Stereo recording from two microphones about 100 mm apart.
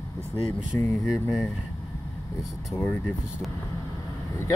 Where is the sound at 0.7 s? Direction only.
30° left (ahead or behind).